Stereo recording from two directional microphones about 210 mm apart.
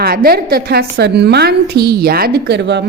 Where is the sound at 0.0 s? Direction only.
45° right (ahead or behind).